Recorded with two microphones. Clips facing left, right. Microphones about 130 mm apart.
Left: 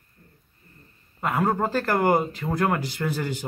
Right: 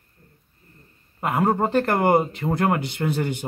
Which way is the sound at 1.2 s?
25° right (ahead or behind).